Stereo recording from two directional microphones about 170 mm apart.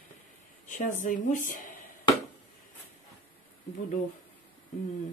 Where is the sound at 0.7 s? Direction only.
50° left (ahead or behind).